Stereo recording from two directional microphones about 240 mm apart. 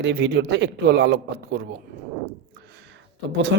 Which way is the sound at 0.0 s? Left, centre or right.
Right.